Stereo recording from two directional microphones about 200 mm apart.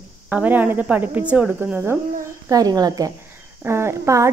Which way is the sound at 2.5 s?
20° right (ahead or behind).